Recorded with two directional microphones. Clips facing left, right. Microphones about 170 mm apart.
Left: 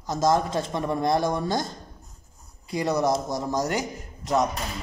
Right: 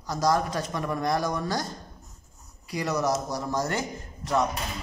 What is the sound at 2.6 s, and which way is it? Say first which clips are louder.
Speech: left 3 dB; 25° left (ahead or behind).